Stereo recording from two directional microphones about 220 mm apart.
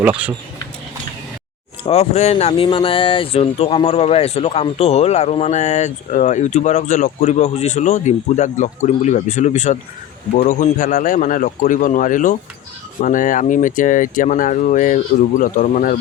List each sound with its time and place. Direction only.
0.0 s speech: 5° right (ahead or behind)
1.8 s speech: 30° left (ahead or behind)